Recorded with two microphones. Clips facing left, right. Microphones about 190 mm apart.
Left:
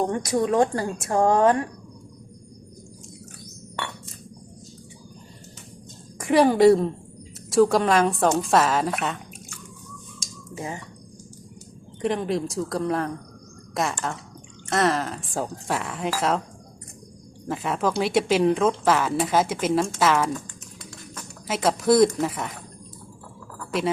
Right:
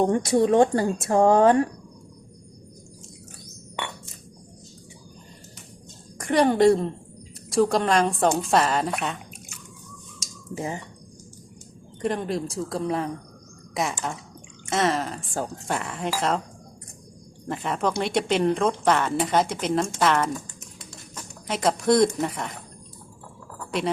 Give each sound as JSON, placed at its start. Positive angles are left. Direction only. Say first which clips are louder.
{"t": 0.0, "sound": "speech", "louder": "right 3 dB", "side_deg": -25}
{"t": 6.1, "sound": "speech", "louder": "left 2 dB", "side_deg": 5}
{"t": 10.6, "sound": "speech", "louder": "right 2 dB", "side_deg": -25}
{"t": 12.0, "sound": "speech", "louder": "left 2 dB", "side_deg": 0}
{"t": 17.5, "sound": "speech", "louder": "left 1 dB", "side_deg": 0}
{"t": 21.4, "sound": "speech", "louder": "left 1 dB", "side_deg": 0}
{"t": 23.7, "sound": "speech", "louder": "left 1 dB", "side_deg": 0}